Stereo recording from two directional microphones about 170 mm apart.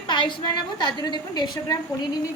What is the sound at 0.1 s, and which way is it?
A woman's voice, 30° left (ahead or behind).